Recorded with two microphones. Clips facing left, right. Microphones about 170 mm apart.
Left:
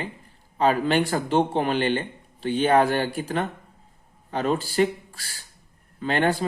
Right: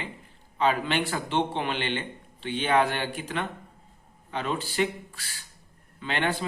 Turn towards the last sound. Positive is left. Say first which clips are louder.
# left 6 dB
turn(degrees=40)  # may be behind; listen again after turning